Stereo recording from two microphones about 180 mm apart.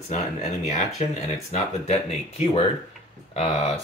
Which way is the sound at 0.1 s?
40° left (ahead or behind).